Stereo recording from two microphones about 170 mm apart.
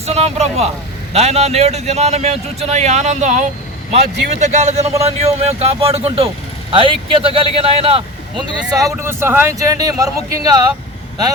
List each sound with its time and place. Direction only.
0.0 s speech: 40° right (ahead or behind)
8.8 s speech: 15° right (ahead or behind)